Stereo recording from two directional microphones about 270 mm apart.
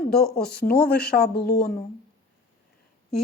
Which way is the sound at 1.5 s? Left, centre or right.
Centre.